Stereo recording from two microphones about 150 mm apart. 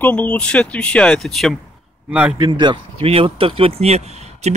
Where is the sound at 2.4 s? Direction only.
30° right (ahead or behind); by 4.5 s 45° right (ahead or behind).